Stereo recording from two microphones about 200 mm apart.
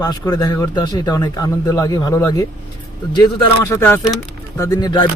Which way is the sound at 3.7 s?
10° left (ahead or behind).